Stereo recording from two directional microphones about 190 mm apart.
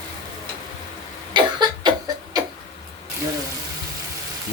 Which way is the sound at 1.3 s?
20° right (ahead or behind).